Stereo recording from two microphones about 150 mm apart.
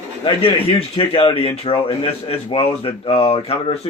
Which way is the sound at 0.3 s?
40° left (ahead or behind).